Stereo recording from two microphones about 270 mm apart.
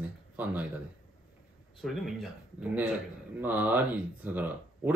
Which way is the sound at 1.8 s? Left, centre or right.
Centre.